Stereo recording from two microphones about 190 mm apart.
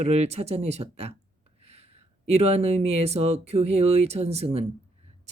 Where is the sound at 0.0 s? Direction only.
35° right (ahead or behind).